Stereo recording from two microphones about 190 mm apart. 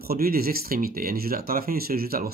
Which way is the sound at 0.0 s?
50° right (ahead or behind).